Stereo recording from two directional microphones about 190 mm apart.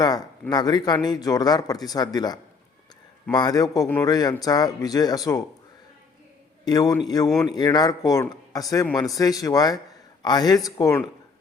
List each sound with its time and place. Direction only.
0.0 s speech: 20° left (ahead or behind)
6.7 s speech: 20° left (ahead or behind)